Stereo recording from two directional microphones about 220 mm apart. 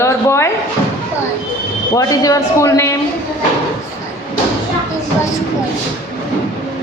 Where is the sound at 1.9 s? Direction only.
15° left (ahead or behind).